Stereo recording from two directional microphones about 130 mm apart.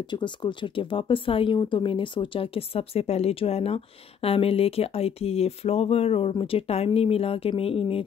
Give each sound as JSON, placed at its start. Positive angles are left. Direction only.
{"t": 0.1, "sound": "speech", "side_deg": 35}